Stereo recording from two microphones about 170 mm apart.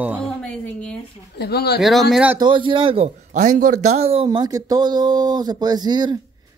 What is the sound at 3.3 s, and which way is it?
Speech, 50° right (ahead or behind).